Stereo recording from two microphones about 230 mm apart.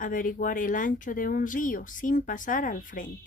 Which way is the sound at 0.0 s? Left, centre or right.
Left.